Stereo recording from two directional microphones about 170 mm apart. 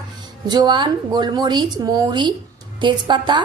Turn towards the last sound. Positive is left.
turn(degrees=-30)  # may be behind; listen again after turning